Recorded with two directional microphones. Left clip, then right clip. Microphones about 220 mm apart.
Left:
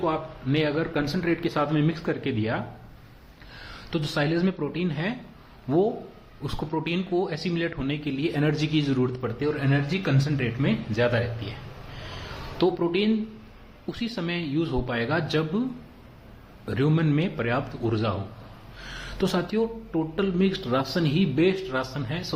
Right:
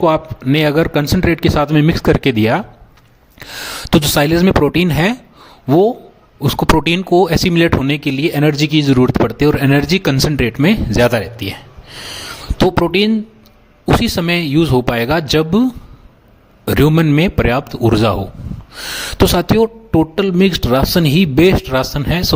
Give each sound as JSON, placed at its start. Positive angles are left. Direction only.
{"t": 0.0, "sound": "speech", "side_deg": -45}
{"t": 12.5, "sound": "speech", "side_deg": -45}
{"t": 16.6, "sound": "speech", "side_deg": -45}